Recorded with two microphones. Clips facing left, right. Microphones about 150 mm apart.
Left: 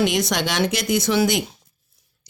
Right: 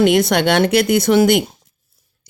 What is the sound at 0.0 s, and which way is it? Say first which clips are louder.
Speech: right 7 dB; 55° right (ahead or behind).